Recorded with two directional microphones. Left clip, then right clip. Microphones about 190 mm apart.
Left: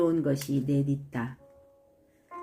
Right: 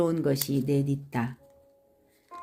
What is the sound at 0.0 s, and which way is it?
Speech, 55° right (ahead or behind).